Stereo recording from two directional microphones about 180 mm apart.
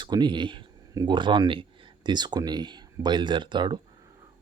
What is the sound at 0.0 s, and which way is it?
Speech, 25° right (ahead or behind).